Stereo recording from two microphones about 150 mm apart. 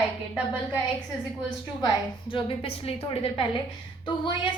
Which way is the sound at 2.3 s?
40° left (ahead or behind).